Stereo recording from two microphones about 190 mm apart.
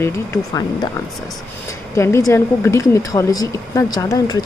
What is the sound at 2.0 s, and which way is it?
A woman's voice, 15° left (ahead or behind).